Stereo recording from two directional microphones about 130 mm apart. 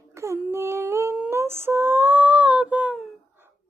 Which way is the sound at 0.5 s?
20° right (ahead or behind).